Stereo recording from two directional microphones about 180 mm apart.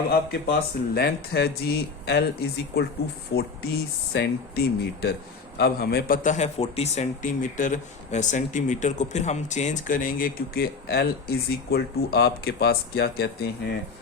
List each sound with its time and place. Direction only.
0.1 s a man's voice: 55° left (ahead or behind)